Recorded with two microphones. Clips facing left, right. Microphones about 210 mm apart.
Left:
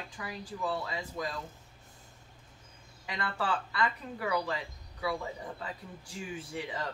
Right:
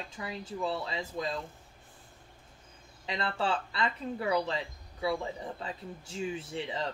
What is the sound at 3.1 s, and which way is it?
Speech, 25° right (ahead or behind).